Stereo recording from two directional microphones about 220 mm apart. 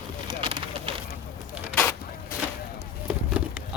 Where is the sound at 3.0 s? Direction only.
5° right (ahead or behind).